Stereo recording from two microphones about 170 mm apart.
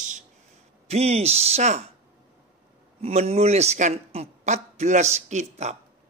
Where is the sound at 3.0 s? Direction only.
35° right (ahead or behind).